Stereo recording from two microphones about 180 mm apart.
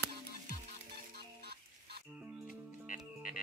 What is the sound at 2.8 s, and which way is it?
Music, 45° left (ahead or behind).